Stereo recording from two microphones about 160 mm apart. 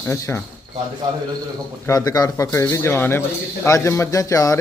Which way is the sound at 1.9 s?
25° left (ahead or behind).